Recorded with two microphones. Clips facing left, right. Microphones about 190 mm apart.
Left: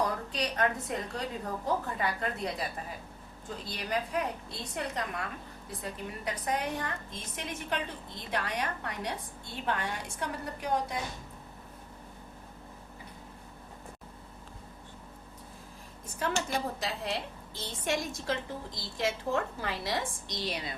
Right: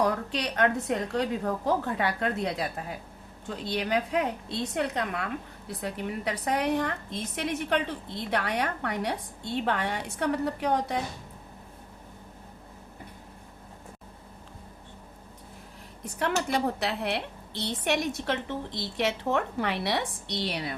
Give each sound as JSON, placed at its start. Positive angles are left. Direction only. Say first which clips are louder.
{"t": 0.0, "sound": "a woman's voice", "louder": "right 4 dB", "side_deg": -70}
{"t": 16.1, "sound": "a woman's voice", "louder": "right 4 dB", "side_deg": -70}